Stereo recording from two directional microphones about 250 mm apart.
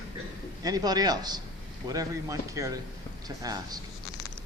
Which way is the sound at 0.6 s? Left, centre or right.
Centre.